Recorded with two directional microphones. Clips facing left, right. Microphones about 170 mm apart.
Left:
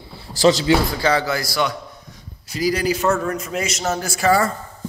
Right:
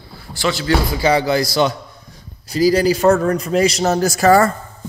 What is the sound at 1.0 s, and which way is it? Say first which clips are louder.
Speech: right 4 dB; 15° right (ahead or behind).